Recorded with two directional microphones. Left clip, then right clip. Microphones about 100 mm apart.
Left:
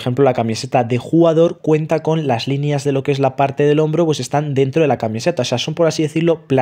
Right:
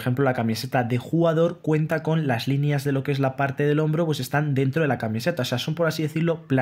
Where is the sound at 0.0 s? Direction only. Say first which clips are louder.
Left 9 dB; 40° left (ahead or behind).